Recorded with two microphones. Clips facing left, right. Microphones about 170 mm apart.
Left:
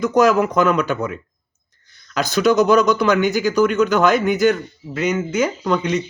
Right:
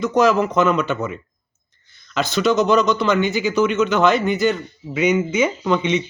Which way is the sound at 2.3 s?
Centre (ahead or behind).